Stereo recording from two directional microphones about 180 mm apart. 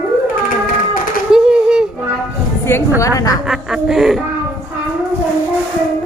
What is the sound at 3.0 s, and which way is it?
Speech, 20° left (ahead or behind).